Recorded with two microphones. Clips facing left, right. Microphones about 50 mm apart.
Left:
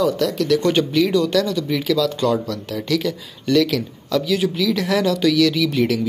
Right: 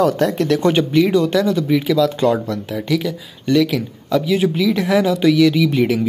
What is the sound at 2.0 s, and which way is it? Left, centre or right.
Speech, right.